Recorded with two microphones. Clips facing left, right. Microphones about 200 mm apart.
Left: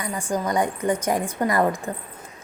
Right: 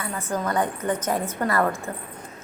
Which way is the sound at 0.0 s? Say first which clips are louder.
Left 2 dB; 15° left (ahead or behind).